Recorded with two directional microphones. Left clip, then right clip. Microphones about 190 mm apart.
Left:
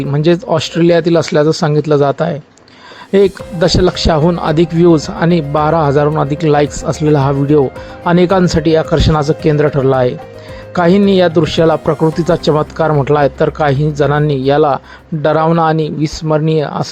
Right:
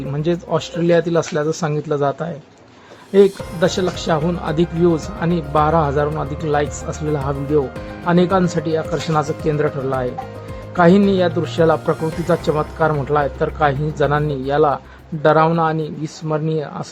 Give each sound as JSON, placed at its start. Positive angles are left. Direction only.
{"t": 0.1, "sound": "speech", "side_deg": 25}
{"t": 3.6, "sound": "speech", "side_deg": 30}